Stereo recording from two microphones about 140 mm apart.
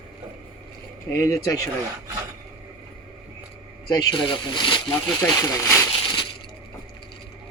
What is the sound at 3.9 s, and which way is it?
Speech, 30° left (ahead or behind).